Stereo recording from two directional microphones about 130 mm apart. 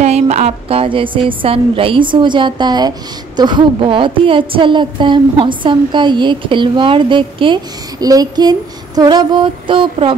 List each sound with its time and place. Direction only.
0.0 s a woman's voice: 60° right (ahead or behind); by 10.1 s 40° right (ahead or behind)